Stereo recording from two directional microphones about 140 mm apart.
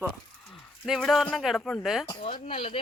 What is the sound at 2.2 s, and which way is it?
Speech, 45° left (ahead or behind).